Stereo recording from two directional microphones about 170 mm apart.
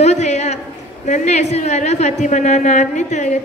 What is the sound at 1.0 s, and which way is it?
A woman's voice, 45° left (ahead or behind).